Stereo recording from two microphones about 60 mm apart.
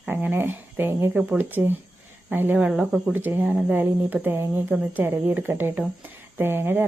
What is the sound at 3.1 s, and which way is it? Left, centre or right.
A woman's voice, right.